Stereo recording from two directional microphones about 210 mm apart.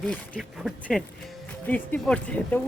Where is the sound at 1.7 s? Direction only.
5° left (ahead or behind).